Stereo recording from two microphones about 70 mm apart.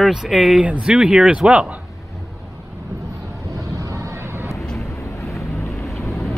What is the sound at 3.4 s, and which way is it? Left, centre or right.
Vehicle, right.